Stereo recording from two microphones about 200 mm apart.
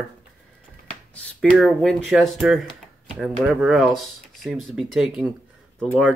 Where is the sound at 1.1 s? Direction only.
5° left (ahead or behind).